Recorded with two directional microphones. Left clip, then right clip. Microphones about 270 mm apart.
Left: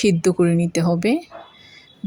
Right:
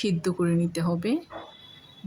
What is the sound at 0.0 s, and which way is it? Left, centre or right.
Speech, centre.